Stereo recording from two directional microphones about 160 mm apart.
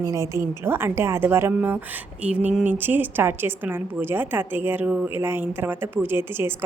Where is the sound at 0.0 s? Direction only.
20° right (ahead or behind).